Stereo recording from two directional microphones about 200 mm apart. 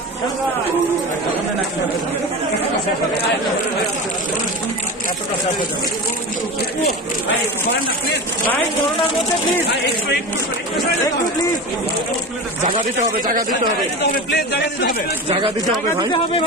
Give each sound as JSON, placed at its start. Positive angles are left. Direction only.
{"t": 12.7, "sound": "a man's voice", "side_deg": -45}
{"t": 14.3, "sound": "speech", "side_deg": 55}
{"t": 15.2, "sound": "speech", "side_deg": -30}